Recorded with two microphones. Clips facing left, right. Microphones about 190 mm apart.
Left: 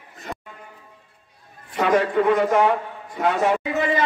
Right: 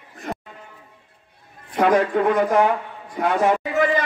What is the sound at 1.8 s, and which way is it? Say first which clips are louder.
A man's voice: right 1 dB; 50° right (ahead or behind).